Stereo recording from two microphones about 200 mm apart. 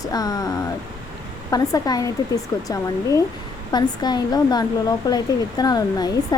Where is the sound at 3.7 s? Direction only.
20° left (ahead or behind).